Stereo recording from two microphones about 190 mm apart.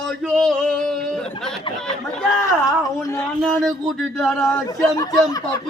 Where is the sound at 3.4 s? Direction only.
5° left (ahead or behind).